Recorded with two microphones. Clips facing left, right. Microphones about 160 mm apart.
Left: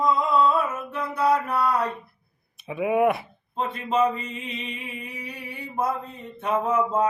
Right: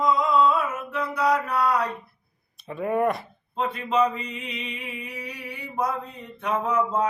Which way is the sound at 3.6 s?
25° left (ahead or behind).